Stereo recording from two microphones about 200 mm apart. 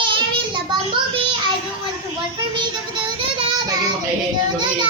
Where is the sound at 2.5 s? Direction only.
20° right (ahead or behind).